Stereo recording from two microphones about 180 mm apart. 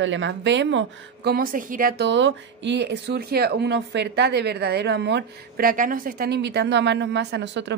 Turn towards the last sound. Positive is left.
turn(degrees=-80)